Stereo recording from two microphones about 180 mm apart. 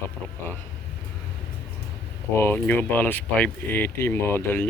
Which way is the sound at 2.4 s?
10° left (ahead or behind).